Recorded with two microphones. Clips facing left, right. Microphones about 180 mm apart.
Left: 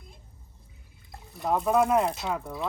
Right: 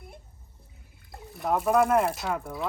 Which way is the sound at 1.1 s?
Centre (ahead or behind).